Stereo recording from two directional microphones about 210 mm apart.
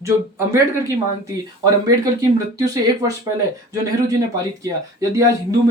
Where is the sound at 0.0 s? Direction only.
15° right (ahead or behind).